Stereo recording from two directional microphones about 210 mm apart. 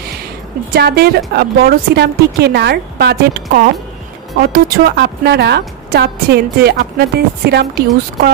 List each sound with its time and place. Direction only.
0.7 s a woman's voice: 50° right (ahead or behind)